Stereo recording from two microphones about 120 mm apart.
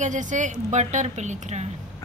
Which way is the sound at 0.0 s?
90° right.